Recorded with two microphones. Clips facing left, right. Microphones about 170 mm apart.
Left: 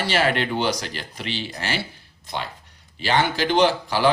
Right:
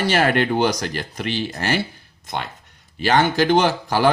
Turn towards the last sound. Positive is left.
turn(degrees=-45)  # may be behind; listen again after turning